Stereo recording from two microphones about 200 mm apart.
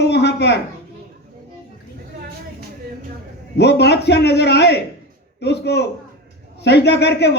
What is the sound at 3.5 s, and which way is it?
Speech, 55° left (ahead or behind).